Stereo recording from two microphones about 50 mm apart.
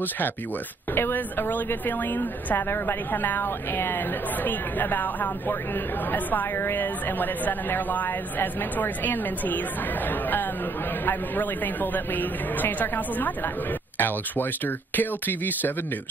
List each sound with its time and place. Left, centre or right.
0.9 s a woman's voice: left
11.1 s speech: left